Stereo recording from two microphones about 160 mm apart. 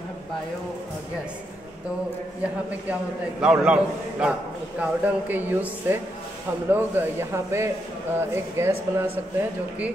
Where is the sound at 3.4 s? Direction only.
5° right (ahead or behind).